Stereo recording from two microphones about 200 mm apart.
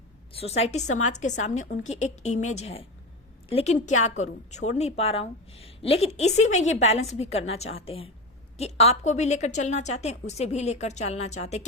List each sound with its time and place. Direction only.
0.3 s a woman's voice: 30° left (ahead or behind)